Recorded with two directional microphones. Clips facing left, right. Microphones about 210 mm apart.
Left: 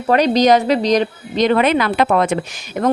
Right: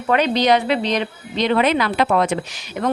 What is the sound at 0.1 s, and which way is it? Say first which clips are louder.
Speech: left 4 dB; 40° left (ahead or behind).